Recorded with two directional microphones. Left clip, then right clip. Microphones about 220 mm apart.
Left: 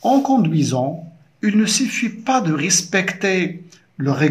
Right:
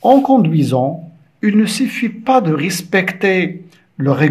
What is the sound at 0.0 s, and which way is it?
Speech, 25° right (ahead or behind).